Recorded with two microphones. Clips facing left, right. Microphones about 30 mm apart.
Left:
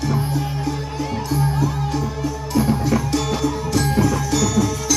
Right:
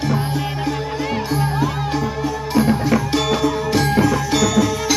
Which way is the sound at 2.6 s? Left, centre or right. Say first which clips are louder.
Right 2 dB; right.